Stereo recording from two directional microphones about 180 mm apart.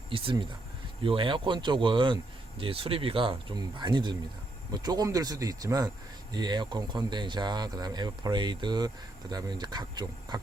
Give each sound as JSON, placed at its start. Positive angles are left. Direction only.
{"t": 0.1, "sound": "speech", "side_deg": -30}